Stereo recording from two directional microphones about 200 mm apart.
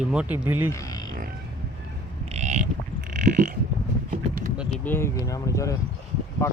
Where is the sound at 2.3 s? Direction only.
35° right (ahead or behind).